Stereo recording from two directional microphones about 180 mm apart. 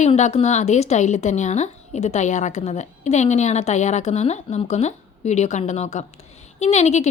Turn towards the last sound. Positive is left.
turn(degrees=40)  # may be behind; listen again after turning